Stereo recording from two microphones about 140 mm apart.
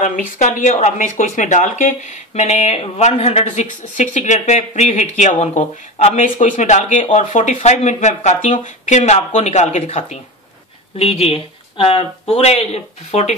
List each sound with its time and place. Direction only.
0.0 s speech: 70° left (ahead or behind); by 13.4 s 55° left (ahead or behind)